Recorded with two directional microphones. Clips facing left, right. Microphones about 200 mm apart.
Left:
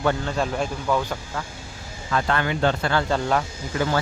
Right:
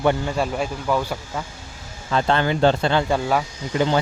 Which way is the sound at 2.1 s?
25° right (ahead or behind).